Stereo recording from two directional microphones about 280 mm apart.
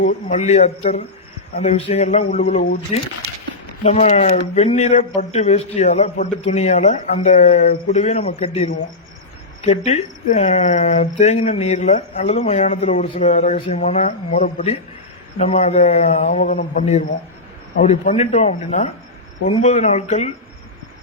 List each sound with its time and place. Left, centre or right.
0.0 s speech: left